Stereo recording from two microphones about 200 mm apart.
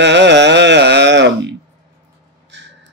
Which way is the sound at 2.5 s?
60° right (ahead or behind).